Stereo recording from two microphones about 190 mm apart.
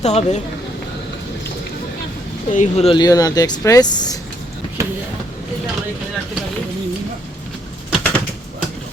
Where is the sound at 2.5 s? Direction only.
40° left (ahead or behind).